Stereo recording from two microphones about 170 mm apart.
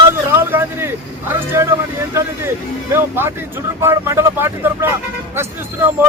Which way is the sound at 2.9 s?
15° right (ahead or behind).